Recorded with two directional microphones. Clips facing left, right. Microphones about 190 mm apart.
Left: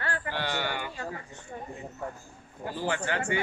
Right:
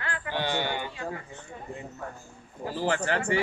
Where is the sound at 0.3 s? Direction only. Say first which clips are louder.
Right 5 dB; 20° right (ahead or behind).